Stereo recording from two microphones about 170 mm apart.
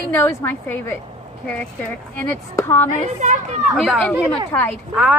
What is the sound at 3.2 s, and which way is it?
Speech, 45° right (ahead or behind).